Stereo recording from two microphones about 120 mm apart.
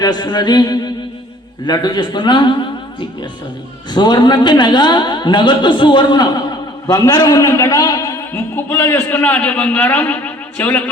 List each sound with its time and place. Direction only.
0.0 s a man's voice: 35° left (ahead or behind)
3.9 s a man's voice: 40° left (ahead or behind)
7.7 s a sound: 35° left (ahead or behind)
8.3 s a man's voice: 20° left (ahead or behind)